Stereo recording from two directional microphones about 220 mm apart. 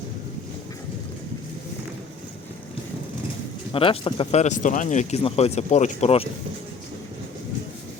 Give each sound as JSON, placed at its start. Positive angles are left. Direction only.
{"t": 3.7, "sound": "speech", "side_deg": 25}